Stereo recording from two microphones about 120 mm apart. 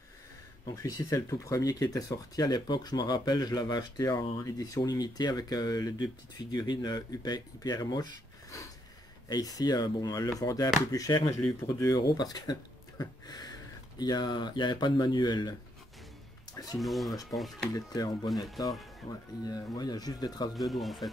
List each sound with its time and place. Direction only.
0.7 s speech: 30° left (ahead or behind)
9.3 s speech: 30° left (ahead or behind)
16.7 s speech: centre (ahead or behind)
17.6 s speech: 30° left (ahead or behind)
20.5 s speech: centre (ahead or behind)